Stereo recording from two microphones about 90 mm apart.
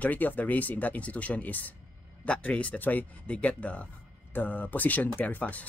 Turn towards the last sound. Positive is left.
turn(degrees=15)  # may be behind; listen again after turning